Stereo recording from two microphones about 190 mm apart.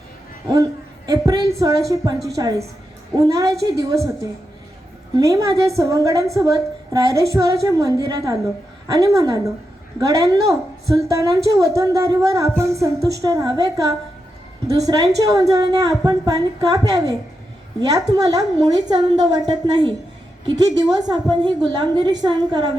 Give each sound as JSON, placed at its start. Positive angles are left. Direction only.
{"t": 0.5, "sound": "a woman's voice", "side_deg": -20}